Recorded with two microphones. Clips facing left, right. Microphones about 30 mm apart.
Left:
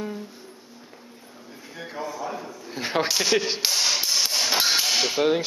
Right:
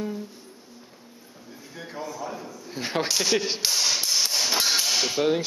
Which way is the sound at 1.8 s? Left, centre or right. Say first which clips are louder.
Left 2 dB; centre.